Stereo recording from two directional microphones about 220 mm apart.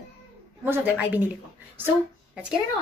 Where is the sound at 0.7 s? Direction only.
10° right (ahead or behind).